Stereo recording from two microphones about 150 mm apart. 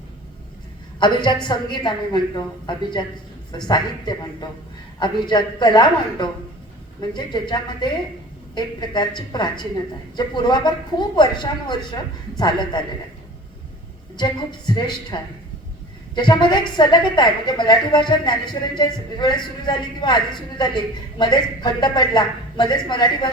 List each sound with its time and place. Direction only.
0.9 s a woman's voice: 30° left (ahead or behind)
14.2 s a man's voice: 30° left (ahead or behind)